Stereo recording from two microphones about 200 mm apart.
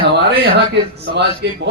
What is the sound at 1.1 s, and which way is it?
Speech, 60° right (ahead or behind).